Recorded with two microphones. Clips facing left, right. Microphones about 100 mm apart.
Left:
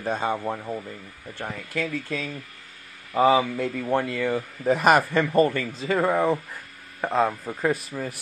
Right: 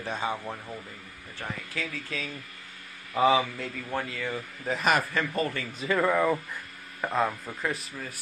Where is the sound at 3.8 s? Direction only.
60° left (ahead or behind).